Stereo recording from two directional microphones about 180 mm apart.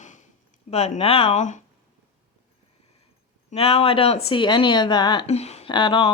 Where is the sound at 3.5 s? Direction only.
30° left (ahead or behind).